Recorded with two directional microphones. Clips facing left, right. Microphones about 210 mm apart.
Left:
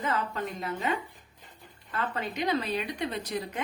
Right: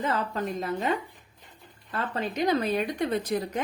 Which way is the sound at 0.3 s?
35° right (ahead or behind).